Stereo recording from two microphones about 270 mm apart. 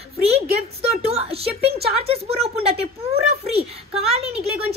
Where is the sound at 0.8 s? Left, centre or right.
Right.